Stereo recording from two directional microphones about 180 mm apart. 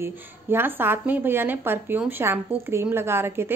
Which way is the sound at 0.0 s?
10° right (ahead or behind).